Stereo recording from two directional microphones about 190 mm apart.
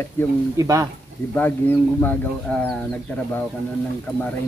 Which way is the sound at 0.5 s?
15° right (ahead or behind).